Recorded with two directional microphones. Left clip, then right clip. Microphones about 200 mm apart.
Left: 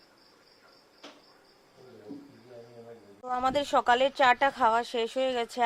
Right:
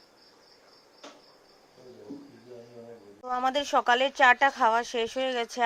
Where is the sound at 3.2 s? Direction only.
5° left (ahead or behind).